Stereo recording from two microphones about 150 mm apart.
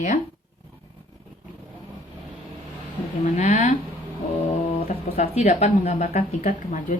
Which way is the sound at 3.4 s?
55° left (ahead or behind).